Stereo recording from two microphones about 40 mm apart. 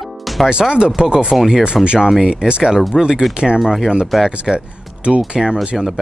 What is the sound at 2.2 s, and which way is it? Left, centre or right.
Speech, right.